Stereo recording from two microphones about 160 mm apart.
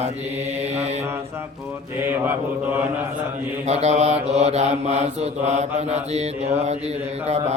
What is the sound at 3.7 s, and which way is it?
Mantra, 45° right (ahead or behind).